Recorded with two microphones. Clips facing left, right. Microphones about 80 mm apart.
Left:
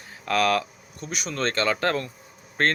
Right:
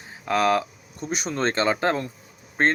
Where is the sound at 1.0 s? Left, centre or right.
Right.